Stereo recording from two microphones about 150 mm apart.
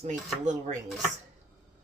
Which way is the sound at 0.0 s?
55° right (ahead or behind).